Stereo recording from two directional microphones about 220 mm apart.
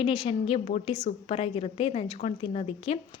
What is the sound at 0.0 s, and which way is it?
A woman's voice, 25° left (ahead or behind).